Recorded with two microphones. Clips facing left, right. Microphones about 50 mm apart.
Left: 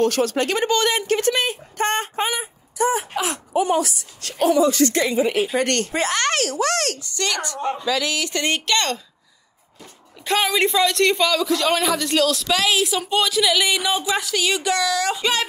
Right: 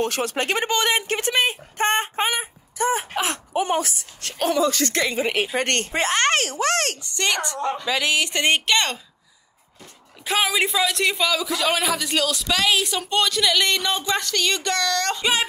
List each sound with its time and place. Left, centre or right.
0.0 s speech: right
2.2 s speech: right
4.4 s speech: right
5.6 s speech: right; by 9.0 s centre
10.2 s a man's voice: centre